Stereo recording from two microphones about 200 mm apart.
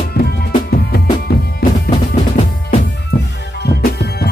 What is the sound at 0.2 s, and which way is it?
Music, 50° left (ahead or behind).